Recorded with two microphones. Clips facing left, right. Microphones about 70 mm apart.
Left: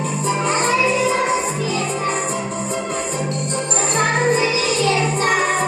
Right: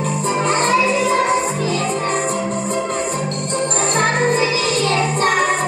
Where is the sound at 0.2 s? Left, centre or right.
Right.